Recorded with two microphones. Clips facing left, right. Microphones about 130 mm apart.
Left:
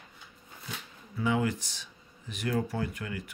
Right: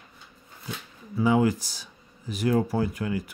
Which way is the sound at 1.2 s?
35° right (ahead or behind).